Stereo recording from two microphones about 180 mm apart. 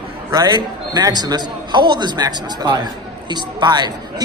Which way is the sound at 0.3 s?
20° right (ahead or behind).